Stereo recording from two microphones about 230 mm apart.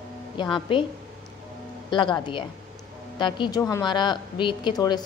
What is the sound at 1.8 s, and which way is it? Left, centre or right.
Speech, left.